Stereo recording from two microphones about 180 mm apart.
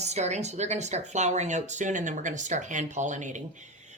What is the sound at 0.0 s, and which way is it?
Speech, 40° right (ahead or behind).